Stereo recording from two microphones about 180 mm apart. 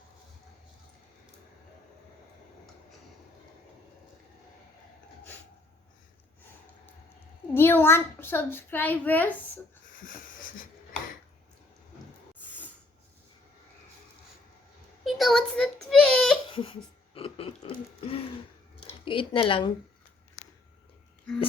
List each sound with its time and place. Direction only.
7.5 s a child's voice: 10° left (ahead or behind)
10.1 s wheeze: 50° left (ahead or behind)
15.0 s a sound: centre (ahead or behind)
16.5 s laughter: 30° left (ahead or behind)
17.2 s burping: 30° left (ahead or behind)
18.9 s speech: 30° left (ahead or behind)